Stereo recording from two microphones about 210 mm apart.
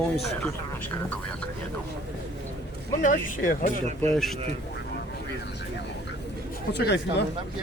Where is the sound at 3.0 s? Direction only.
40° left (ahead or behind).